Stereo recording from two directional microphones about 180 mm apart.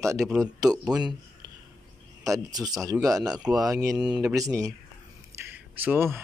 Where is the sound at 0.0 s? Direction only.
15° right (ahead or behind).